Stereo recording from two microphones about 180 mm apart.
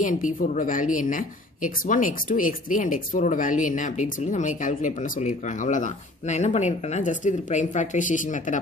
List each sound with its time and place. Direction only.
0.0 s a woman's voice: 45° left (ahead or behind)